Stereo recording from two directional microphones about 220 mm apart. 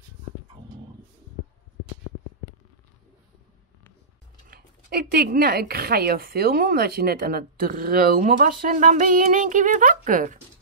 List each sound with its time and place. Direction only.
4.5 s speech: 45° right (ahead or behind)